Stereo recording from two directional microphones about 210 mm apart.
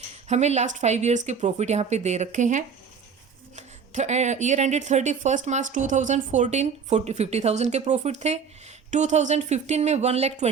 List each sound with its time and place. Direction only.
0.3 s speech: 30° right (ahead or behind)